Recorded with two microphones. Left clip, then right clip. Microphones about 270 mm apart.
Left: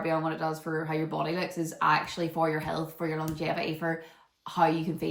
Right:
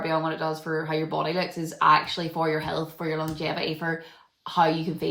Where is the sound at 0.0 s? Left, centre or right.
Centre.